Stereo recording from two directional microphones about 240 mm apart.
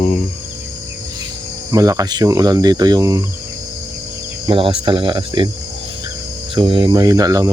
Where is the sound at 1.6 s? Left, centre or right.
Centre.